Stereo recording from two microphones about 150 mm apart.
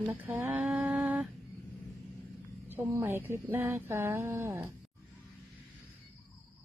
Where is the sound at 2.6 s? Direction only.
15° right (ahead or behind).